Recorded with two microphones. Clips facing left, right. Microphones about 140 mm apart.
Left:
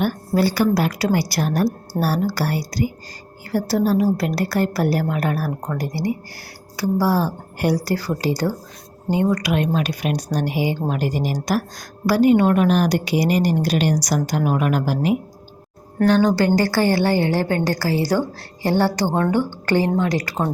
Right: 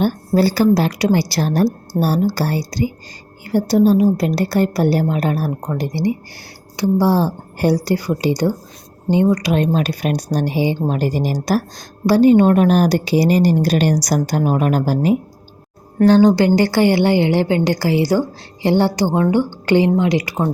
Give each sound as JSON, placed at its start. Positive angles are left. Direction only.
{"t": 0.0, "sound": "a woman's voice", "side_deg": -30}
{"t": 9.4, "sound": "a woman's voice", "side_deg": -30}
{"t": 16.0, "sound": "a woman's voice", "side_deg": -25}